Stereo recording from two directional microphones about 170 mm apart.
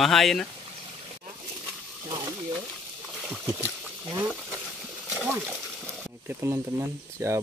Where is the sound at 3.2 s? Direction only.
15° right (ahead or behind).